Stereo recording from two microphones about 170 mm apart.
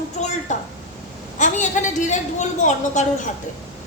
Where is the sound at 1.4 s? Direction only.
45° left (ahead or behind).